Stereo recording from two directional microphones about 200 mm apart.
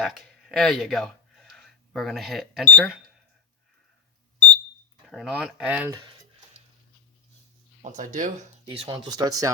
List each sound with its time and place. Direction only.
0.0 s speech: centre (ahead or behind)
5.0 s speech: centre (ahead or behind)
7.8 s speech: 40° right (ahead or behind)
8.6 s speech: 25° right (ahead or behind)